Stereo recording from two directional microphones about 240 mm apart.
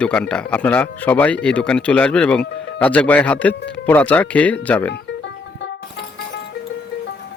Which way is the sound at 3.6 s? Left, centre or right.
Left.